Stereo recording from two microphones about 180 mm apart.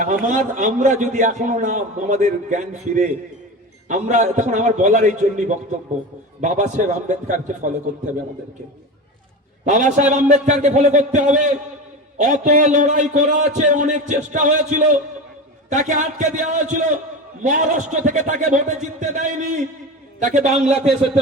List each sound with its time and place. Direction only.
0.3 s a man's voice: 45° right (ahead or behind)
9.6 s a man's voice: 45° right (ahead or behind)